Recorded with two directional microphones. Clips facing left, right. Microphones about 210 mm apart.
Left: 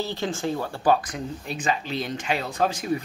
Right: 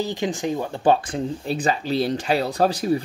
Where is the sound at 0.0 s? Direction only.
15° right (ahead or behind).